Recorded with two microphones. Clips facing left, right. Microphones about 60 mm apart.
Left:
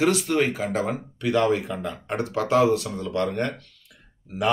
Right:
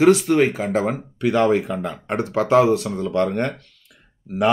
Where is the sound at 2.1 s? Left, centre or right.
Right.